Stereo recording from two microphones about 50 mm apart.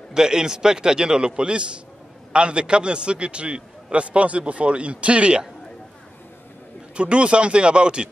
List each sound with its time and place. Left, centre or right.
0.1 s a man's voice: centre
7.0 s a man's voice: right